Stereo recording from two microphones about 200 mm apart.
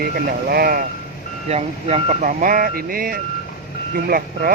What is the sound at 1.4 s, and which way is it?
Speech, 30° right (ahead or behind).